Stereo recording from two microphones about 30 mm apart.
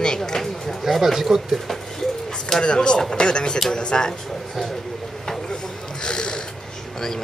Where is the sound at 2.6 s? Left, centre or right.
Left.